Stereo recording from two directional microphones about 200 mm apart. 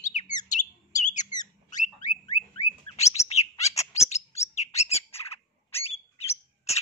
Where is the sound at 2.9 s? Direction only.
35° left (ahead or behind).